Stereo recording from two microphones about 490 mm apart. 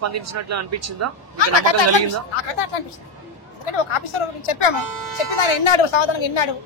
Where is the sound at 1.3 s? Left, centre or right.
Left.